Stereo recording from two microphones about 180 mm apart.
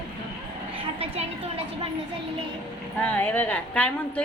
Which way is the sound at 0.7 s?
30° right (ahead or behind).